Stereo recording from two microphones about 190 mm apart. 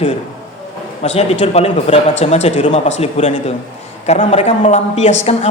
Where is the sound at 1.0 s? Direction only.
35° left (ahead or behind).